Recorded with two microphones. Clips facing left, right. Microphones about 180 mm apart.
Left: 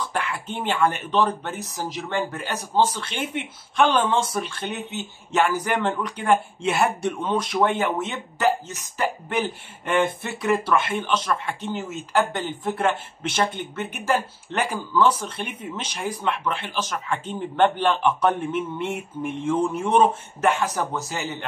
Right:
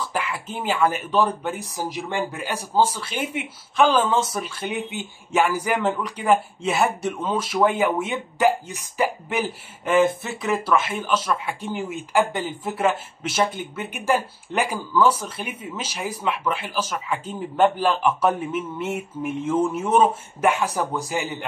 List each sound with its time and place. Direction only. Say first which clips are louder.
0.0 s speech: even; 5° right (ahead or behind)